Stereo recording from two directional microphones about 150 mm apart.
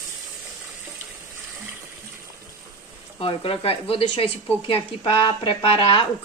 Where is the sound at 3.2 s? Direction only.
35° left (ahead or behind).